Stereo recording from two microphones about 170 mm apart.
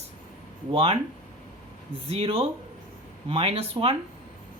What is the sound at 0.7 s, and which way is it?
Speech, 35° right (ahead or behind).